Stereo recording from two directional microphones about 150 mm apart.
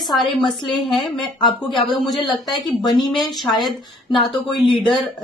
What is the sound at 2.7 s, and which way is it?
Speech, 25° left (ahead or behind).